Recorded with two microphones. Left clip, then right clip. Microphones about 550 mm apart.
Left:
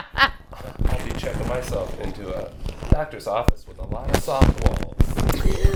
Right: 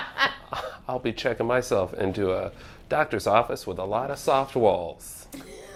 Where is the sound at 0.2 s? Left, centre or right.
Left.